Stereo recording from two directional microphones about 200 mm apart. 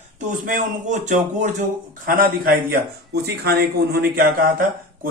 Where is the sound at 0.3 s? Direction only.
40° right (ahead or behind).